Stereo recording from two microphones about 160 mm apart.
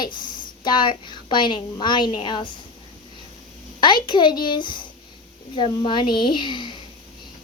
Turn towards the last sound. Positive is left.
turn(degrees=30)  # may be behind; listen again after turning